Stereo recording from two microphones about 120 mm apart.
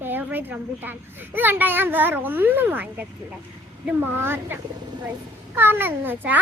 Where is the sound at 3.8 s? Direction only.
20° right (ahead or behind).